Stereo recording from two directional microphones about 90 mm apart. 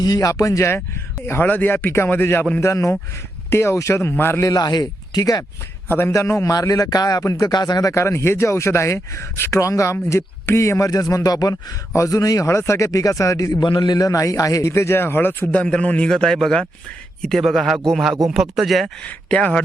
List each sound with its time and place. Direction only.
0.0 s speech: 45° left (ahead or behind)
1.3 s speech: 20° left (ahead or behind)
4.4 s speech: 50° left (ahead or behind)
5.9 s speech: 30° left (ahead or behind)
13.6 s speech: 60° left (ahead or behind); by 14.7 s 40° left (ahead or behind)
14.7 s speech: 25° left (ahead or behind)
15.6 s a man's voice: 15° left (ahead or behind)
19.0 s a man's voice: 15° left (ahead or behind)